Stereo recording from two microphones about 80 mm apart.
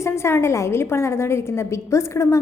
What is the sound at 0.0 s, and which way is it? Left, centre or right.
A woman's voice, left.